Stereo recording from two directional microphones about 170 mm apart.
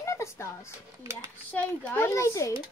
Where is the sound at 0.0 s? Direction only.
15° left (ahead or behind).